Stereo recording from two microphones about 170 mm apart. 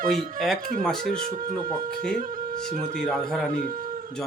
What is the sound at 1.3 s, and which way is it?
Speech, 55° right (ahead or behind).